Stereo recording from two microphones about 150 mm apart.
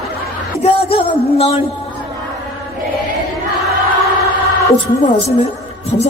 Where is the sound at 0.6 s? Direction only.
40° left (ahead or behind).